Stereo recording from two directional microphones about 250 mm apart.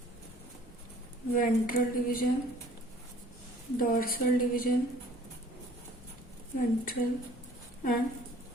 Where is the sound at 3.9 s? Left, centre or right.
Left.